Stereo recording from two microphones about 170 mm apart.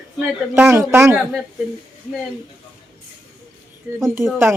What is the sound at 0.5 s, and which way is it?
Speech, 15° right (ahead or behind).